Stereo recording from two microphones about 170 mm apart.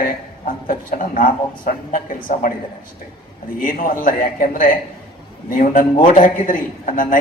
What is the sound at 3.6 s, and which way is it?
A man's voice, 55° left (ahead or behind).